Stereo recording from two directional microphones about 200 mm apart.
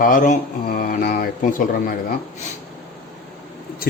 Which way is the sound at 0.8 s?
45° left (ahead or behind).